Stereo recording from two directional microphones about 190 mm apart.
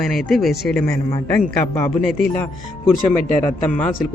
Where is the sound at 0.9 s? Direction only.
15° left (ahead or behind).